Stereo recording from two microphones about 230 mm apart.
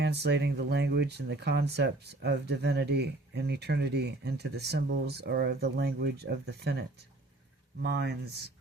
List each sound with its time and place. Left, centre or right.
0.0 s speech: right